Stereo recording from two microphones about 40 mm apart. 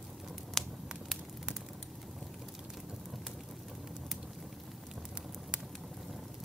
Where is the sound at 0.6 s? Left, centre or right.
Centre.